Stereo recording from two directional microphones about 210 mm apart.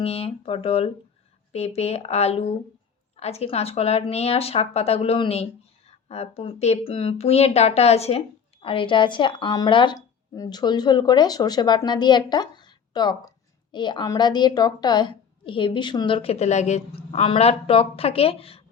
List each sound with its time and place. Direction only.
0.0 s speech: 30° left (ahead or behind)